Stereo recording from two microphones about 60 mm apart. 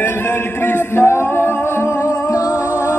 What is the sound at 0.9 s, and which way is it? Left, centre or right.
Singing, left.